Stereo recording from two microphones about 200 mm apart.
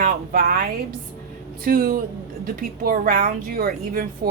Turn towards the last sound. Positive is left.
turn(degrees=-50)  # may be behind; listen again after turning